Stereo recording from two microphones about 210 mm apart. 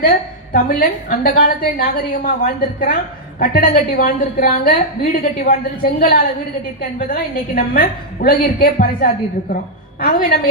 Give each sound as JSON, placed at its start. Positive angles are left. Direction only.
{"t": 0.0, "sound": "a woman's voice", "side_deg": 45}